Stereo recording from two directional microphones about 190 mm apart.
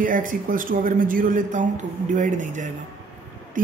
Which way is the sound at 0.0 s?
45° right (ahead or behind).